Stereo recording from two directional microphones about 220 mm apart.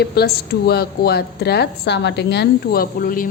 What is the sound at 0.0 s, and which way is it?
A woman's voice, 45° left (ahead or behind).